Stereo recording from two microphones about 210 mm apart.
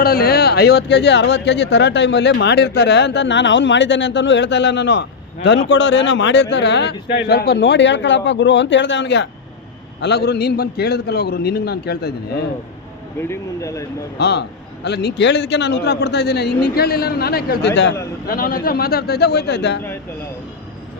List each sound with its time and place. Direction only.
0.0 s a man's voice: 45° left (ahead or behind)
13.2 s speech: 15° left (ahead or behind)
14.2 s a man's voice: 50° left (ahead or behind)